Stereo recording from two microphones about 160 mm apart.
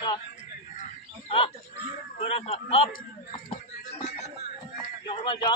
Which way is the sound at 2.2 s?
40° left (ahead or behind).